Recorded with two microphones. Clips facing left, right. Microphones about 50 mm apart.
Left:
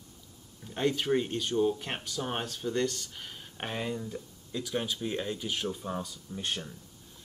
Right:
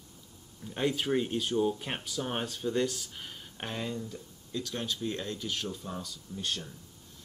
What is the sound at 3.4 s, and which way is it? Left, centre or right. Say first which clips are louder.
Speech: left 2 dB; centre.